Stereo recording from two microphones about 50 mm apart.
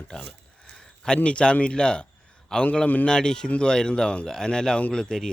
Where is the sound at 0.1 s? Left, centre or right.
Centre.